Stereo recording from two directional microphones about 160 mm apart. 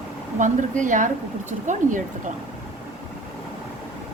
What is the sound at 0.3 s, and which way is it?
Speech, 50° right (ahead or behind).